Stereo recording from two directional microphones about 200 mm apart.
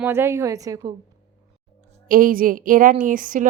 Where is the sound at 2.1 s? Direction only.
45° right (ahead or behind).